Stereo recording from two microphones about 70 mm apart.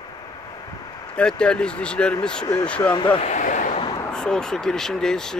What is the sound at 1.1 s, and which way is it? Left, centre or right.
Speech, centre.